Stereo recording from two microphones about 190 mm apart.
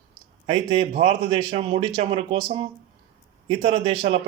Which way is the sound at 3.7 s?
25° right (ahead or behind).